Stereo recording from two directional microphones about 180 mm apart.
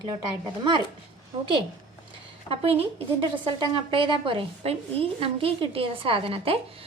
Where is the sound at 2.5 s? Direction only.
35° right (ahead or behind).